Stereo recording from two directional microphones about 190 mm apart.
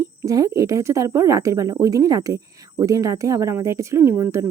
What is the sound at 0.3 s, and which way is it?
Speech, 15° right (ahead or behind).